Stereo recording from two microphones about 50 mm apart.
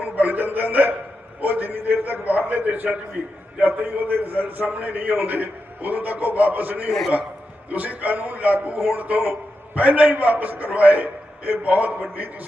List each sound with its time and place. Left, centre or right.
0.0 s a man's voice: right